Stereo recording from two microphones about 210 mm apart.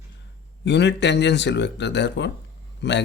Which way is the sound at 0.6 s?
55° left (ahead or behind).